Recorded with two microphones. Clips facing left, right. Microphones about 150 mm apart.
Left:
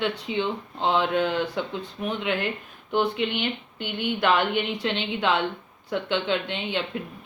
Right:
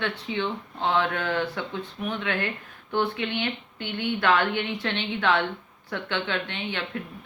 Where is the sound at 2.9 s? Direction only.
15° left (ahead or behind).